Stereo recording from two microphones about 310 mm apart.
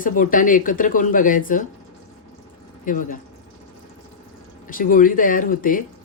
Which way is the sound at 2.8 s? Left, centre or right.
Left.